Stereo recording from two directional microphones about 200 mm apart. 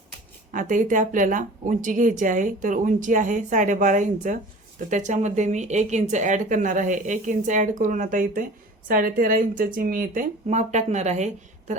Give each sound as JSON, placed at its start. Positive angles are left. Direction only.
{"t": 0.5, "sound": "speech", "side_deg": -40}